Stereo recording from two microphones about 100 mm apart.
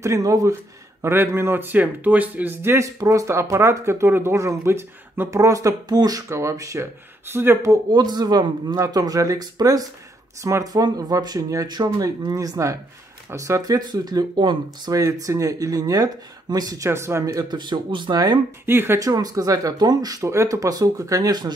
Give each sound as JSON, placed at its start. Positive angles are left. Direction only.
{"t": 0.0, "sound": "speech", "side_deg": -35}
{"t": 7.9, "sound": "speech", "side_deg": -45}
{"t": 15.0, "sound": "speech", "side_deg": -35}
{"t": 18.7, "sound": "speech", "side_deg": -25}
{"t": 18.9, "sound": "speech", "side_deg": -35}